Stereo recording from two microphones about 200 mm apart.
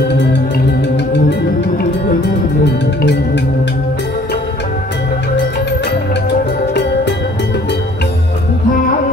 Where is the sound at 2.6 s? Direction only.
60° left (ahead or behind).